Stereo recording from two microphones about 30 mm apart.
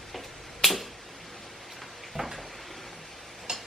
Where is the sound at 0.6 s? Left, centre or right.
Centre.